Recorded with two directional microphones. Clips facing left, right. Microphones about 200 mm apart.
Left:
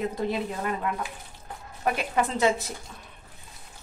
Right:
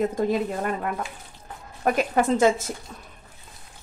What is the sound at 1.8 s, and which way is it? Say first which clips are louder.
Speech: right 4 dB; 45° right (ahead or behind).